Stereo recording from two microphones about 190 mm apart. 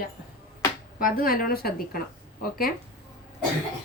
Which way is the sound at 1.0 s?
50° left (ahead or behind).